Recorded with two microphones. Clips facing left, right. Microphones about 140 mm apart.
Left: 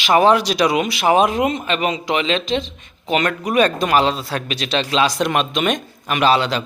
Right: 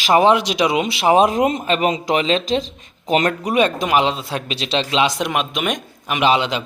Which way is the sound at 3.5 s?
15° right (ahead or behind).